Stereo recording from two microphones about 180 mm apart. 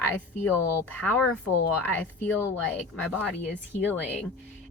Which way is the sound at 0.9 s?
10° left (ahead or behind).